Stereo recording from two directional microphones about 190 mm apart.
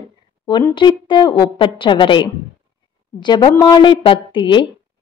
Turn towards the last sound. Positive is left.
turn(degrees=25)  # may be behind; listen again after turning